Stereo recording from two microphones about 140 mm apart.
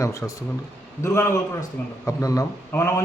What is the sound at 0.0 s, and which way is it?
A man's voice, 25° left (ahead or behind).